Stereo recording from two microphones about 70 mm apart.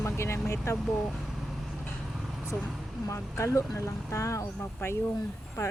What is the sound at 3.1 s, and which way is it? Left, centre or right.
Speech, left.